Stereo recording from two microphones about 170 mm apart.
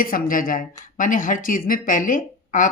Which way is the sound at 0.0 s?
55° left (ahead or behind).